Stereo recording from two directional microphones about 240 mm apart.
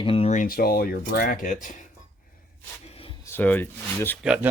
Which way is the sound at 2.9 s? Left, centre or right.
Left.